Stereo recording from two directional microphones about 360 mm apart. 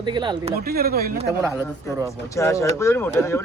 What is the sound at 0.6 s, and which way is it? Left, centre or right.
Speech, right.